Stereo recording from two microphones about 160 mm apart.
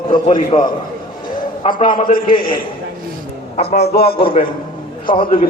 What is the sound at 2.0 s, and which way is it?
Speech, 60° left (ahead or behind).